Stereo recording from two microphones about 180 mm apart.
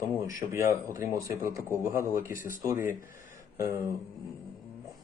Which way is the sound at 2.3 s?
50° left (ahead or behind).